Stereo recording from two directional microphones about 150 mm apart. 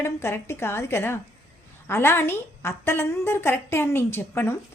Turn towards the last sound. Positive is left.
turn(degrees=15)  # may be behind; listen again after turning